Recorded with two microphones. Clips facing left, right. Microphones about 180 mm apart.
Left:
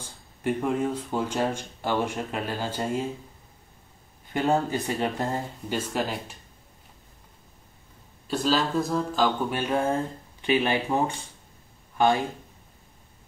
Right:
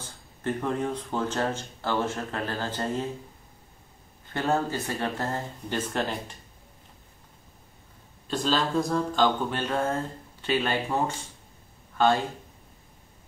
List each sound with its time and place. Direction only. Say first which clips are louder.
0.4 s speech: left 3 dB; 10° left (ahead or behind)
4.3 s speech: left 2 dB; 15° left (ahead or behind)
8.3 s speech: left 2 dB; 5° left (ahead or behind)